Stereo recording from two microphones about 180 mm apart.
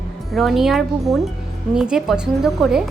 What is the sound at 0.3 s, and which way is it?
A woman's voice, centre (ahead or behind).